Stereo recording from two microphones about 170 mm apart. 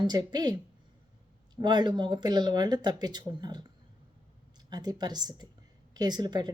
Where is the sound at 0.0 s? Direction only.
25° right (ahead or behind).